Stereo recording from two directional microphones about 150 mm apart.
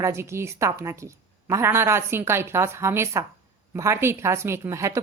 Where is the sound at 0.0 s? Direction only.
20° right (ahead or behind).